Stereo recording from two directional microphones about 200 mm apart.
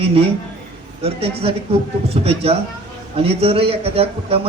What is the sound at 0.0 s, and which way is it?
A man's voice, 30° right (ahead or behind).